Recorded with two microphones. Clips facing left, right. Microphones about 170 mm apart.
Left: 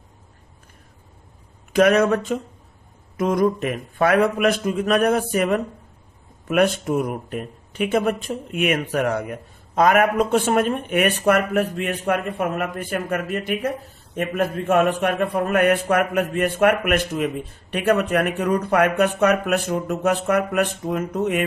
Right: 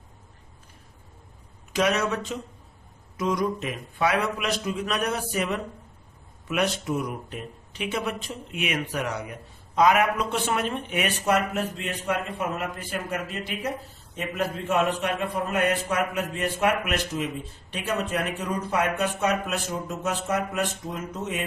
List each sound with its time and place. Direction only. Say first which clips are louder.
1.7 s a man's voice: left 8 dB; 55° left (ahead or behind)